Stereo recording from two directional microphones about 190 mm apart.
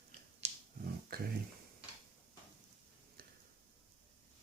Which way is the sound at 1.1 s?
55° right (ahead or behind).